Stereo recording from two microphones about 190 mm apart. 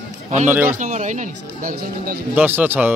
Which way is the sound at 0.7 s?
40° right (ahead or behind).